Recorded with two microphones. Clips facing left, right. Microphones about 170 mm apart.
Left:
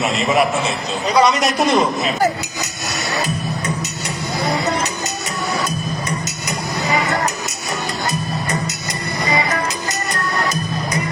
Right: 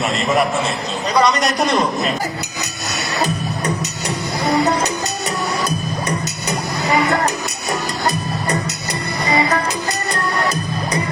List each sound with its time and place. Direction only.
0.0 s a man's voice: centre (ahead or behind)